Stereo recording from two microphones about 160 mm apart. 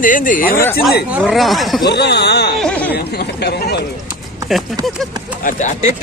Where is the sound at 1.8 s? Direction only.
90° left.